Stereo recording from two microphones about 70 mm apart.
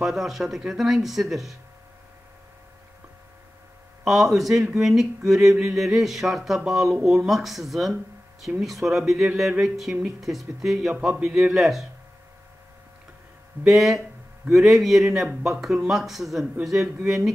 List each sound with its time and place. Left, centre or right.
0.0 s speech: centre
4.0 s speech: centre
13.7 s speech: centre